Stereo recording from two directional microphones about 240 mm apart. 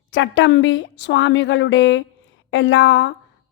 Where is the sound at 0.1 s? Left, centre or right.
Left.